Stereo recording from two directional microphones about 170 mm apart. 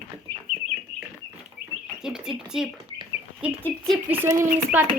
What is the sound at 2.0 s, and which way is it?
Speech, 5° right (ahead or behind).